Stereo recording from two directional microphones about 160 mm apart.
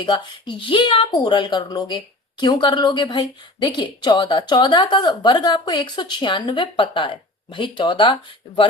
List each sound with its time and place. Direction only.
0.0 s a woman's voice: 30° left (ahead or behind)